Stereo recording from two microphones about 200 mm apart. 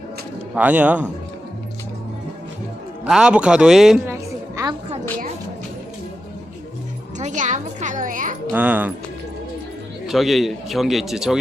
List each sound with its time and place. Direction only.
0.5 s a man's voice: 5° right (ahead or behind)
3.0 s music: 5° right (ahead or behind)
7.2 s music: 35° right (ahead or behind)
8.5 s a man's voice: 10° right (ahead or behind)
10.1 s a man's voice: centre (ahead or behind)